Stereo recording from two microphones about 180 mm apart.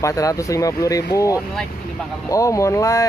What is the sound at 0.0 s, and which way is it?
Speech, 20° left (ahead or behind).